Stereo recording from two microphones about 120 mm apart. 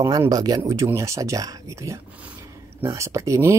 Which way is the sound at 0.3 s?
30° right (ahead or behind).